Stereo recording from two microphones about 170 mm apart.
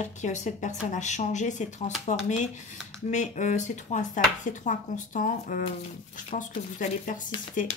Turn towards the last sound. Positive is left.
turn(degrees=50)  # may be behind; listen again after turning